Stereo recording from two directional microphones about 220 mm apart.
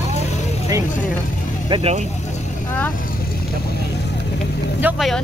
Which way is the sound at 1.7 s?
25° right (ahead or behind).